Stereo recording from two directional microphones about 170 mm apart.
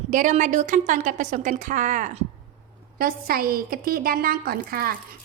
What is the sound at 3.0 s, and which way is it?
A woman's voice, 60° right (ahead or behind).